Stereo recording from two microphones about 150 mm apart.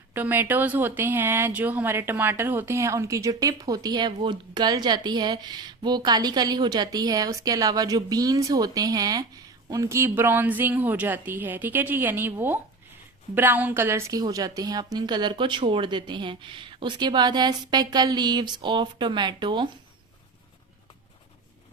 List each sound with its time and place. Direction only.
0.1 s speech: 15° right (ahead or behind); by 19.6 s 30° right (ahead or behind)